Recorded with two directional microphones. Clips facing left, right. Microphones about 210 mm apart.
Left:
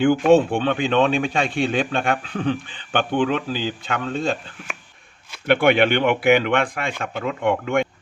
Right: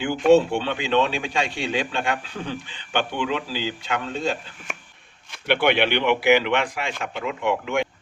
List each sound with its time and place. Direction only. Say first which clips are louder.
0.0 s speech: left 2 dB; 50° left (ahead or behind)
5.5 s speech: left 4 dB; 50° left (ahead or behind)